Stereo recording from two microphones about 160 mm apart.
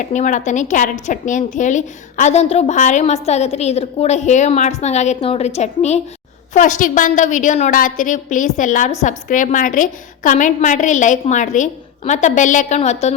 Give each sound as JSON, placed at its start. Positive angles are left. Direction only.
{"t": 0.0, "sound": "a woman's voice", "side_deg": 50}